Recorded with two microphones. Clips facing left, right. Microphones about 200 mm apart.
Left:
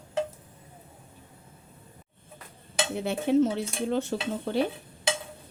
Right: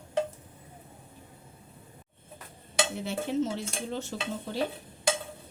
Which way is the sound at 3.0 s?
60° left (ahead or behind).